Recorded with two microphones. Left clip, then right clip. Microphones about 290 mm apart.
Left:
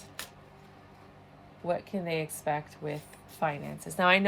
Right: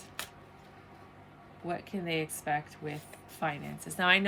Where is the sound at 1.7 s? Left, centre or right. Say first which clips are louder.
Left 4 dB; centre.